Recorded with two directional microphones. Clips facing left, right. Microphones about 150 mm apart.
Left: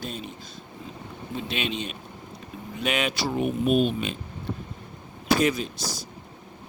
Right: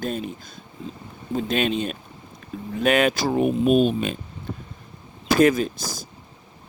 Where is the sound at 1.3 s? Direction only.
45° right (ahead or behind).